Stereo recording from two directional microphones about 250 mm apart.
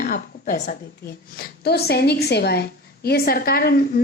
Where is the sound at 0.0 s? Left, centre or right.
Left.